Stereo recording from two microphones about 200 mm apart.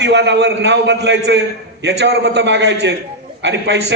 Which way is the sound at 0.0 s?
60° right (ahead or behind).